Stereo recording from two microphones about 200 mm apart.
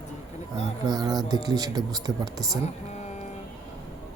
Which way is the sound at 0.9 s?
20° right (ahead or behind).